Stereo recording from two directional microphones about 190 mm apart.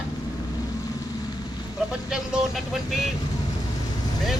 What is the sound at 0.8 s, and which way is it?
Vehicle, 20° left (ahead or behind).